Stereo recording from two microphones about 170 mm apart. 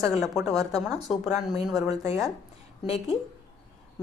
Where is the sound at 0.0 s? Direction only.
Centre (ahead or behind).